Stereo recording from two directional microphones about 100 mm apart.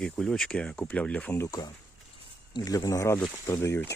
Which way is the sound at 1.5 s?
45° left (ahead or behind).